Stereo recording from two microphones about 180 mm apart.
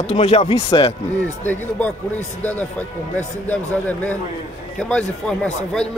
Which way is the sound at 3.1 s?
10° left (ahead or behind).